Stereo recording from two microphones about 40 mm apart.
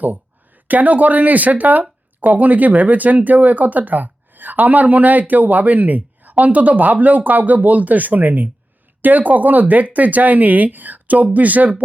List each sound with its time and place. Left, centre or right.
0.0 s speech: right